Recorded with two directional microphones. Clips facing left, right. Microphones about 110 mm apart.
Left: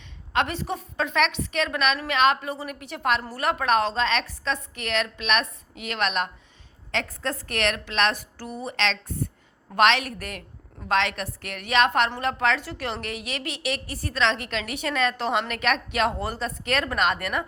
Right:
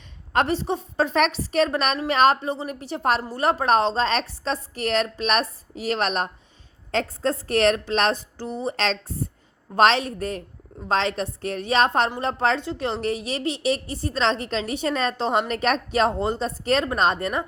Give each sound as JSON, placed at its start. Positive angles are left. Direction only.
{"t": 0.3, "sound": "a woman's voice", "side_deg": -30}